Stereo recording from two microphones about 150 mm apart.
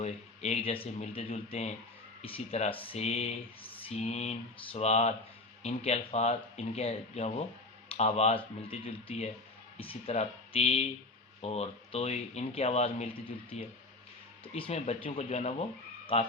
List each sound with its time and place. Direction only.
0.0 s speech: 40° left (ahead or behind)